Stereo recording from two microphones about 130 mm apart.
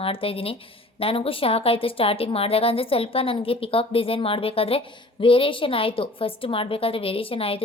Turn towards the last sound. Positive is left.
turn(degrees=45)  # may be behind; listen again after turning